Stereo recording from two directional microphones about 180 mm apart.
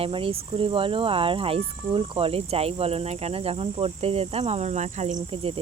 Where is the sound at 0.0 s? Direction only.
30° right (ahead or behind).